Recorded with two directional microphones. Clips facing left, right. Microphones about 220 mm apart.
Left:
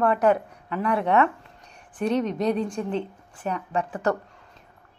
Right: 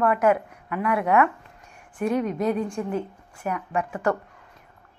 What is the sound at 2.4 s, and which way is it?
Speech, 20° left (ahead or behind).